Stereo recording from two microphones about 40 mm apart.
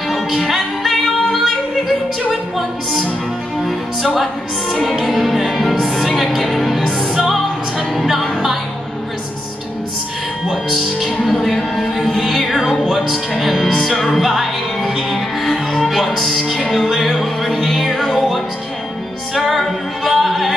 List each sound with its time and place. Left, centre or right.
0.5 s music: centre
2.5 s music: centre
5.0 s music: centre
10.5 s music: centre
19.3 s a capella: centre